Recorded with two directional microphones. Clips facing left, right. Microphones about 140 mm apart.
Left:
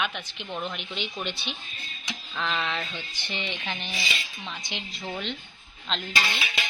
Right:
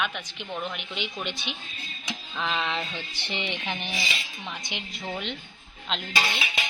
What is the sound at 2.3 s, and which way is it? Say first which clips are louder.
Speech: right 1 dB; 15° right (ahead or behind).